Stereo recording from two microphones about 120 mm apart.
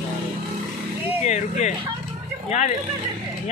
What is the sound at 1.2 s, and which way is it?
Speech, 75° left (ahead or behind).